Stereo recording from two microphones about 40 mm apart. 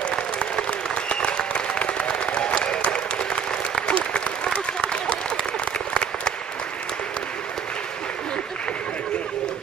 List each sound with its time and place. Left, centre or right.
0.1 s applause: left